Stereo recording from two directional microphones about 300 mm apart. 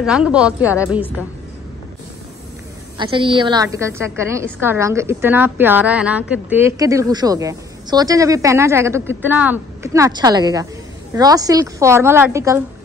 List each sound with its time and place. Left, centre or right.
0.0 s a woman's voice: centre
3.0 s a woman's voice: centre